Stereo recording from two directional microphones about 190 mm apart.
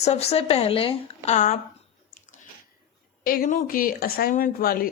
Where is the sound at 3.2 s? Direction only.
50° left (ahead or behind).